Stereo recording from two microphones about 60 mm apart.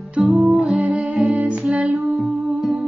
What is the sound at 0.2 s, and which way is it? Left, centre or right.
Music, centre.